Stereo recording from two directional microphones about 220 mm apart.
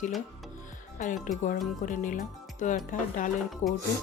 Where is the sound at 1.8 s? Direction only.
35° left (ahead or behind).